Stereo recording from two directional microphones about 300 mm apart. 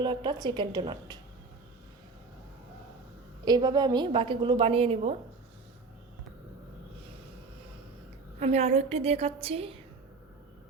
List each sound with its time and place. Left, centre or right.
0.0 s a woman's voice: centre
3.4 s a woman's voice: centre
8.4 s a woman's voice: right